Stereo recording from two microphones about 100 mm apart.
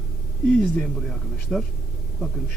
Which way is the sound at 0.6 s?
Centre (ahead or behind).